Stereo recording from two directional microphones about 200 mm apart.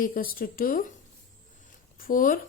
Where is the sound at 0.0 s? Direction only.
45° left (ahead or behind).